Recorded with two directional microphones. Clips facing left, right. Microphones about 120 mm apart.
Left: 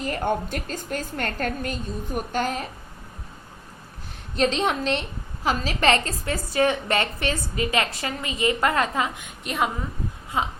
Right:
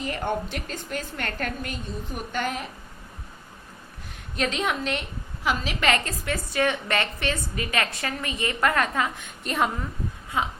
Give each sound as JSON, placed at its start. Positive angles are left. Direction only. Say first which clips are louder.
{"t": 0.0, "sound": "a woman's voice", "louder": "left 3 dB", "side_deg": 45}
{"t": 4.4, "sound": "a woman's voice", "louder": "left 4 dB", "side_deg": 30}
{"t": 9.4, "sound": "a woman's voice", "louder": "even", "side_deg": 5}
{"t": 10.3, "sound": "a woman's voice", "louder": "left 1 dB", "side_deg": 25}